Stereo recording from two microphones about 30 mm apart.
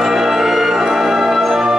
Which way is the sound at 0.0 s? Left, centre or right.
Centre.